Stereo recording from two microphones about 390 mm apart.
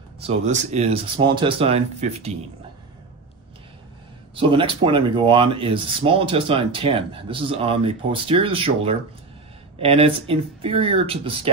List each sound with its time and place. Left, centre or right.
0.5 s speech: centre
4.4 s speech: centre